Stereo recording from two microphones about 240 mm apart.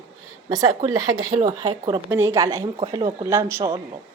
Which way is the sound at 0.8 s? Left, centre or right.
Centre.